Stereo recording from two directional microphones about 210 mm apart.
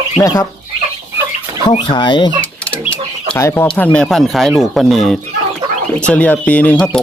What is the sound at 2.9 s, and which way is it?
Speech, 10° left (ahead or behind).